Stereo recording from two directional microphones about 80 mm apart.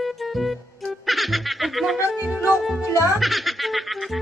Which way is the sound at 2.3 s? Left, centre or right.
Left.